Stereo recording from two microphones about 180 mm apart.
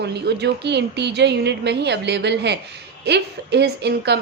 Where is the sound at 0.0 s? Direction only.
70° right (ahead or behind).